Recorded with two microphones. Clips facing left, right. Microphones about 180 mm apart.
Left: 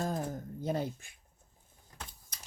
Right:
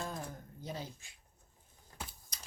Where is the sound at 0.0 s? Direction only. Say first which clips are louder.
Left 7 dB; 45° left (ahead or behind).